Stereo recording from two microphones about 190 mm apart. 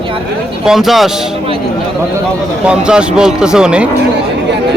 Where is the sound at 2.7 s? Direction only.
5° right (ahead or behind).